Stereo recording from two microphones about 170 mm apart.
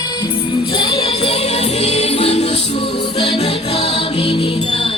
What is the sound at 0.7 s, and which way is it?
Music, 30° left (ahead or behind).